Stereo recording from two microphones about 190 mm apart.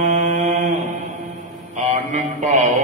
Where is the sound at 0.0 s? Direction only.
40° right (ahead or behind).